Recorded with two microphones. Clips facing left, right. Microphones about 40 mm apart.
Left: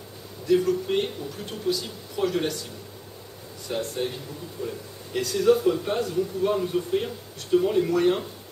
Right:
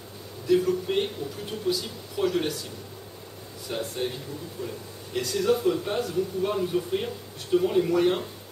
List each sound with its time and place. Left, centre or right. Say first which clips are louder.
0.5 s a man's voice: left 1 dB; centre
3.6 s a man's voice: left 2 dB; centre